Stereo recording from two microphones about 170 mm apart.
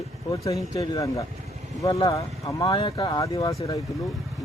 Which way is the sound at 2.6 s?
35° left (ahead or behind).